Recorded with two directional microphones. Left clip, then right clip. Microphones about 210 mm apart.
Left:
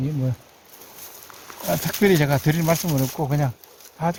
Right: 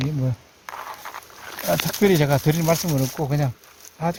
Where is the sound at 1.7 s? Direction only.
Centre (ahead or behind).